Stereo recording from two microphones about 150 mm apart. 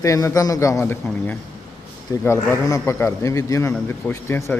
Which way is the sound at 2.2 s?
20° left (ahead or behind).